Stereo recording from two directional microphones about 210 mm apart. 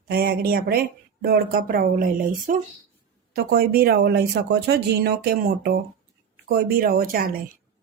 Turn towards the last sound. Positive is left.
turn(degrees=-45)  # may be behind; listen again after turning